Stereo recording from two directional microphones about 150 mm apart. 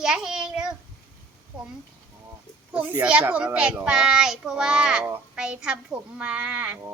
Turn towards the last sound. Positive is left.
turn(degrees=-10)  # may be behind; listen again after turning